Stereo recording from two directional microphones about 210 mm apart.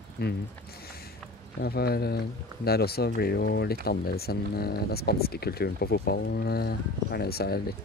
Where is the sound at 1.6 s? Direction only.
45° left (ahead or behind).